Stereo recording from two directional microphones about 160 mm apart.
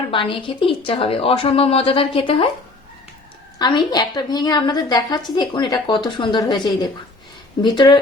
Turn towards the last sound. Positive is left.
turn(degrees=30)  # may be behind; listen again after turning